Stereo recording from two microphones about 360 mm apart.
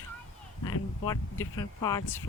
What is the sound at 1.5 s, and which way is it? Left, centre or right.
Speech, centre.